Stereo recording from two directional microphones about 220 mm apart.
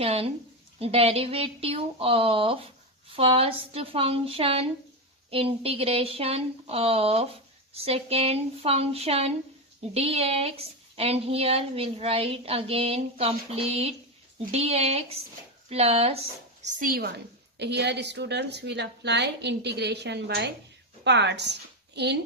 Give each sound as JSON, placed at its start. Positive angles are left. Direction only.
{"t": 0.0, "sound": "a woman's voice", "side_deg": -25}
{"t": 16.6, "sound": "a woman's voice", "side_deg": -40}